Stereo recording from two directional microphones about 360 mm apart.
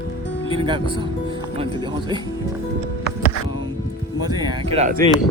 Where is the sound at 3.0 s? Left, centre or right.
Left.